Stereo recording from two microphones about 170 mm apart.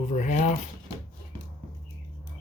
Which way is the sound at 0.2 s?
45° left (ahead or behind).